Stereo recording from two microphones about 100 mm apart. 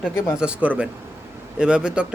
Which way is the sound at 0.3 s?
10° right (ahead or behind).